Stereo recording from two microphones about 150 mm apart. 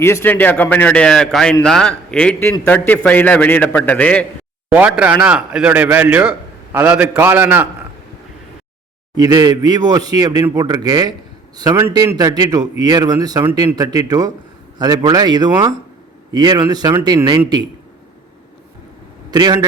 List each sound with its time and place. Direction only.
0.0 s a man's voice: 15° left (ahead or behind)
4.7 s speech: 10° right (ahead or behind)
9.1 s a man's voice: 25° right (ahead or behind)
19.3 s a man's voice: 25° right (ahead or behind)